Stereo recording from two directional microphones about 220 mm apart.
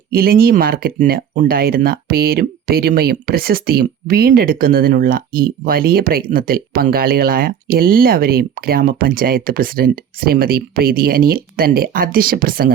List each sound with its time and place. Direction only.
0.1 s speech: 45° right (ahead or behind)